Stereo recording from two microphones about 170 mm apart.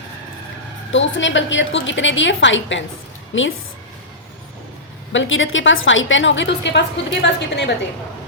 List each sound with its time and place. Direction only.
0.9 s a woman's voice: 90° left
5.1 s a woman's voice: 90° left